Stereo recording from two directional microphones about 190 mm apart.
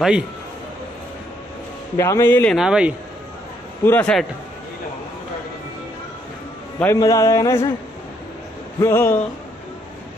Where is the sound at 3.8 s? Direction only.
5° left (ahead or behind).